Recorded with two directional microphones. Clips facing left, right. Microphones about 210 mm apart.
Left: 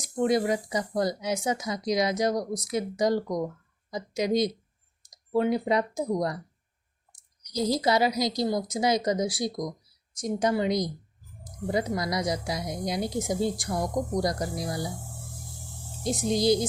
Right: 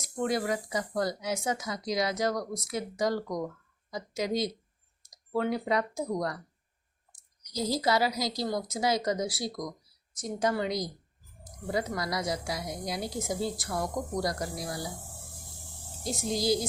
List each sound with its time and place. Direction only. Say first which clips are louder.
0.2 s speech: left 5 dB; 20° left (ahead or behind)
7.5 s speech: left 3 dB; 20° left (ahead or behind)
16.3 s speech: left 5 dB; 20° left (ahead or behind)